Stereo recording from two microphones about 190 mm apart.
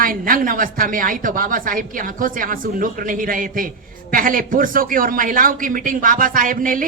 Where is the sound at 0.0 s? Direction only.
45° right (ahead or behind).